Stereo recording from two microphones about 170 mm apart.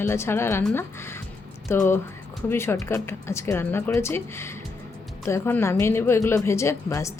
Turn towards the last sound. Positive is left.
turn(degrees=15)  # may be behind; listen again after turning